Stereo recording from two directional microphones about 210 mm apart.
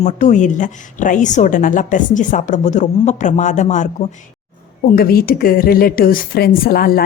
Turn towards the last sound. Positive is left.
turn(degrees=45)  # may be behind; listen again after turning